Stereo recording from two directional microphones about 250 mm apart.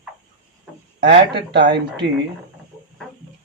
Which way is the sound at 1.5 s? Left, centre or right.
Right.